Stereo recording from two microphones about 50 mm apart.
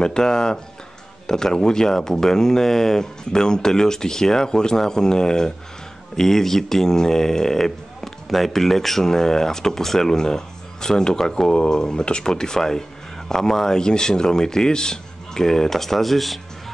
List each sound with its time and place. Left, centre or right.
0.0 s speech: centre